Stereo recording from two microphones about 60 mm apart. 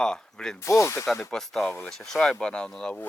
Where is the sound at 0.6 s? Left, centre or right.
Left.